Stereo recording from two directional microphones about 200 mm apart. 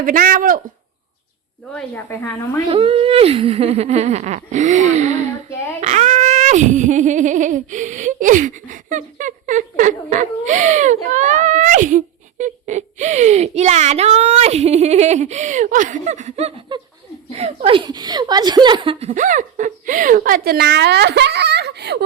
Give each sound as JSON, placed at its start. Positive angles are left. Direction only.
{"t": 0.0, "sound": "speech", "side_deg": -45}
{"t": 1.7, "sound": "speech", "side_deg": 10}
{"t": 2.6, "sound": "giggle", "side_deg": -30}